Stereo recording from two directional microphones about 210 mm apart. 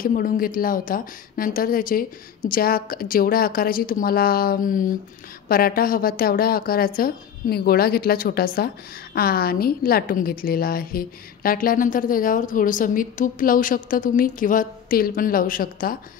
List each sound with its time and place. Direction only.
0.0 s a woman's voice: 40° left (ahead or behind)